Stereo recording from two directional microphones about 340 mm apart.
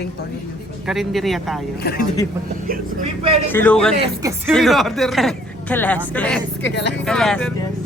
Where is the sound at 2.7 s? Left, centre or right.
Right.